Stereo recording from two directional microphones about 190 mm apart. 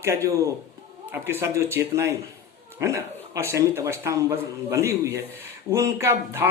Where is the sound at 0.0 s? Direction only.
15° right (ahead or behind).